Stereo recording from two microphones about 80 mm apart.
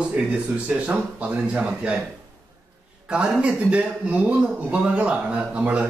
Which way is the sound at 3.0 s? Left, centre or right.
Centre.